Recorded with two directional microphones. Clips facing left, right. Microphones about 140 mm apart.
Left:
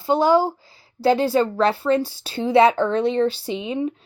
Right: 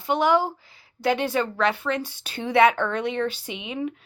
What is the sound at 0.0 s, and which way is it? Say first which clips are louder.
A woman's voice: left 4 dB; 30° left (ahead or behind).